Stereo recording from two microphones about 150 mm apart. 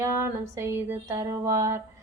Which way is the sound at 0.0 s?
20° right (ahead or behind).